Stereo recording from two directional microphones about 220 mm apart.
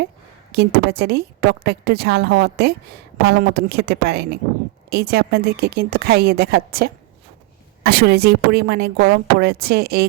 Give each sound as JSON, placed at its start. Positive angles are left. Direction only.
{"t": 0.5, "sound": "a woman's voice", "side_deg": -45}